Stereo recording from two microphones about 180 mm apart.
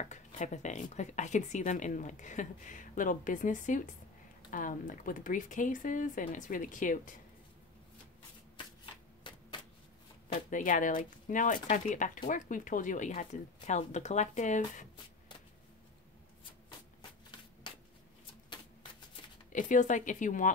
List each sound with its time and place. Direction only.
0.0 s speech: 40° left (ahead or behind)
9.3 s a sound: 25° left (ahead or behind)
10.3 s speech: 45° left (ahead or behind)
18.5 s typewriter: 25° left (ahead or behind)
19.5 s speech: 45° left (ahead or behind)